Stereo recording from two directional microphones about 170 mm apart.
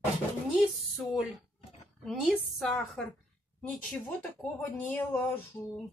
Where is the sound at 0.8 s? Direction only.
Centre (ahead or behind).